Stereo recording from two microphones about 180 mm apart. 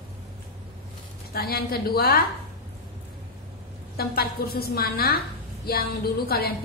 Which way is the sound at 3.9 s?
60° left (ahead or behind).